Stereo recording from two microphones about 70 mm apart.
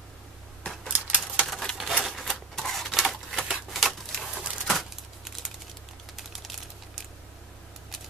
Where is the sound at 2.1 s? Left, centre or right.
Centre.